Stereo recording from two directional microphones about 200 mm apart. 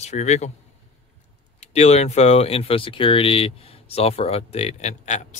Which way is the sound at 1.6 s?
30° left (ahead or behind).